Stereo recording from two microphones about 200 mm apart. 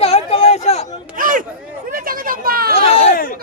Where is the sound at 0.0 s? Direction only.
30° left (ahead or behind).